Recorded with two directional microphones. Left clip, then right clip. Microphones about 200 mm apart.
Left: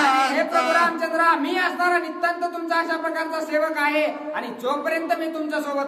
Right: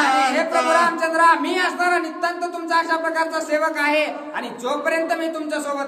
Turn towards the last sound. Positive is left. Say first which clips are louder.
# right 1 dB
turn(degrees=-10)  # may be behind; listen again after turning